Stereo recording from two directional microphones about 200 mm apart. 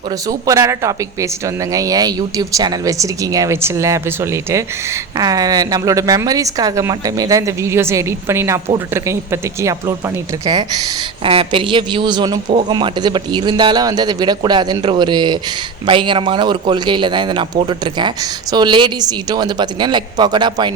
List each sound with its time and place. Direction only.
0.3 s a woman's voice: 15° right (ahead or behind)